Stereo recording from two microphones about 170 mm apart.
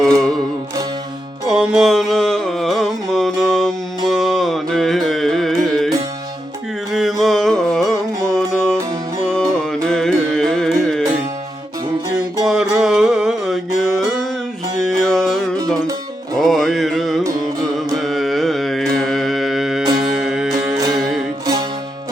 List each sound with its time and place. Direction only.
0.0 s music: centre (ahead or behind)
1.5 s music: 5° right (ahead or behind)
6.9 s music: centre (ahead or behind)
12.4 s music: 5° right (ahead or behind)
14.8 s music: centre (ahead or behind)
15.6 s music: 20° right (ahead or behind)
16.4 s music: centre (ahead or behind)
17.7 s carnatic music: centre (ahead or behind)
20.1 s music: 5° right (ahead or behind)
20.7 s music: 25° right (ahead or behind)